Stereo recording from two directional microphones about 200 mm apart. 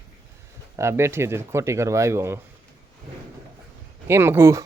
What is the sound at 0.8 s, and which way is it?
Speech, 15° right (ahead or behind).